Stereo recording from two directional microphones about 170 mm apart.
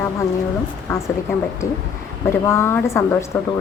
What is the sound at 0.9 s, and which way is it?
Speech, 15° left (ahead or behind).